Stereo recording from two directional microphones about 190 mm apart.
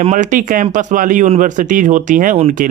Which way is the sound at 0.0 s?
40° right (ahead or behind).